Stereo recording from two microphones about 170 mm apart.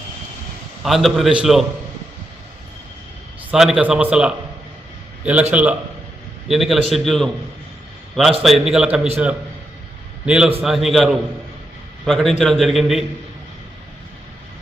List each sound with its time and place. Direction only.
0.8 s a man's voice: centre (ahead or behind)
3.5 s a man's voice: 5° right (ahead or behind)
10.2 s a man's voice: 5° right (ahead or behind)